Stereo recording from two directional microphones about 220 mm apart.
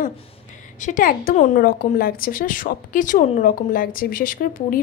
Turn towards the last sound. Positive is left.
turn(degrees=40)  # may be behind; listen again after turning